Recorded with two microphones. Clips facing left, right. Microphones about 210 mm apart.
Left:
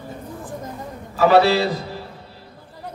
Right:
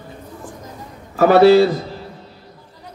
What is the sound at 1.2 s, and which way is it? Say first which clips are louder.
Speech: right 5 dB; 50° right (ahead or behind).